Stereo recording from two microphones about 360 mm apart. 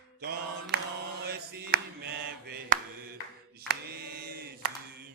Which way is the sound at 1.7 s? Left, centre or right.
Right.